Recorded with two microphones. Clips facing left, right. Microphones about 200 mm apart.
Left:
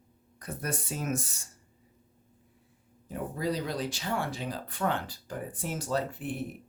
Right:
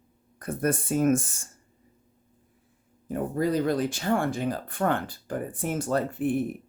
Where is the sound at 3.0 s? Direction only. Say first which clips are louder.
Right 6 dB; 50° right (ahead or behind).